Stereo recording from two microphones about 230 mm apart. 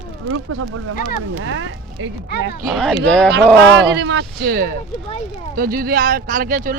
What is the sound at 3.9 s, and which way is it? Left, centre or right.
Speech, right.